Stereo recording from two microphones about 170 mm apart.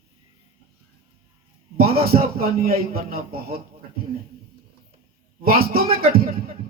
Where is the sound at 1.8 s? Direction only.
65° right (ahead or behind).